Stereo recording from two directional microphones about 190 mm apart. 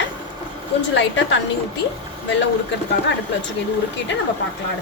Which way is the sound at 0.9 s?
75° left (ahead or behind).